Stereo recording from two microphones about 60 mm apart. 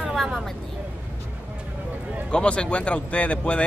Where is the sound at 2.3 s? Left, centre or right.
Centre.